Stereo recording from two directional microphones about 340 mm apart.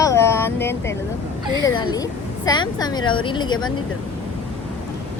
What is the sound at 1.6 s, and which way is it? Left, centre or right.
A woman's voice, centre.